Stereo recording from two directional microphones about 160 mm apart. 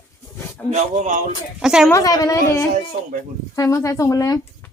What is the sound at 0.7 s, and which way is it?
Speech, 50° right (ahead or behind).